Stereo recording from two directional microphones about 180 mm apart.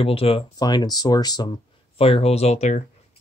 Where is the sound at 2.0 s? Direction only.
35° left (ahead or behind).